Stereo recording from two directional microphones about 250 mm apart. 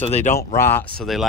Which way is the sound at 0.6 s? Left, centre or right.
Centre.